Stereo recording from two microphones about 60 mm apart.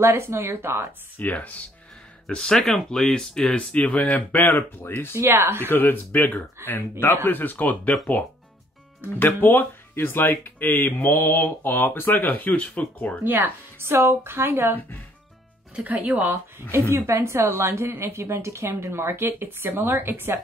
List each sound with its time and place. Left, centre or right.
0.0 s a woman's voice: right
1.1 s speech: left
2.2 s speech: centre
3.7 s speech: left
5.1 s a woman's voice: right
5.7 s speech: left
9.1 s speech: left
13.2 s speech: right
15.7 s speech: right
16.9 s a woman's voice: right